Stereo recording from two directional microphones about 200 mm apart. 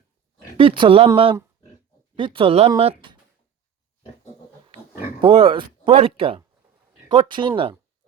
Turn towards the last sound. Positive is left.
turn(degrees=-25)  # may be behind; listen again after turning